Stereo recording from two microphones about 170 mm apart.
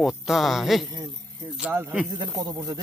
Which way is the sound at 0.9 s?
25° right (ahead or behind).